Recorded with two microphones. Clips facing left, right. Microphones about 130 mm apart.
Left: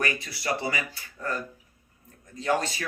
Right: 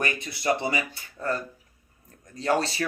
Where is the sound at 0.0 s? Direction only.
20° right (ahead or behind).